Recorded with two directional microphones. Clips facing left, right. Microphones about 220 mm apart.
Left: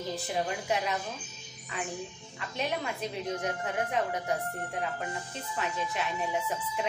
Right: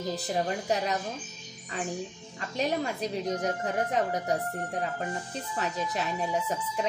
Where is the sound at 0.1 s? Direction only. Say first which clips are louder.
Right 2 dB; 40° right (ahead or behind).